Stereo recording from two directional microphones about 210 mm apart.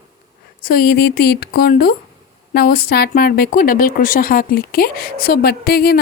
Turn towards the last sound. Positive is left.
turn(degrees=50)  # may be behind; listen again after turning